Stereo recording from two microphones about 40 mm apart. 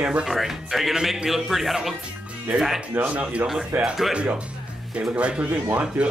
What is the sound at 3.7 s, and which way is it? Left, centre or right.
Speech, right.